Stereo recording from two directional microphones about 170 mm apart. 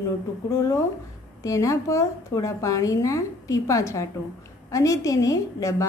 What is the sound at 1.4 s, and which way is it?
A woman's voice, 20° left (ahead or behind).